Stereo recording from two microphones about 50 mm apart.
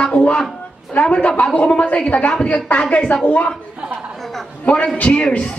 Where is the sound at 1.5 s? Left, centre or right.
Left.